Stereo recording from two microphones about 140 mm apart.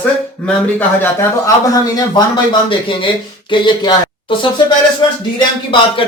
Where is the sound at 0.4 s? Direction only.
15° left (ahead or behind).